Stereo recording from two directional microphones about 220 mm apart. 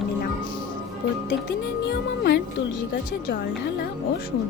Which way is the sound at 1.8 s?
50° left (ahead or behind).